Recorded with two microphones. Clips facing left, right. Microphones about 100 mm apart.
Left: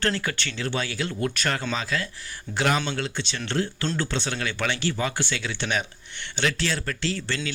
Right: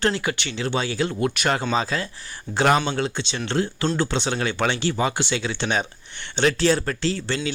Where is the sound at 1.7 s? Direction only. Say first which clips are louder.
Right 5 dB; 35° right (ahead or behind).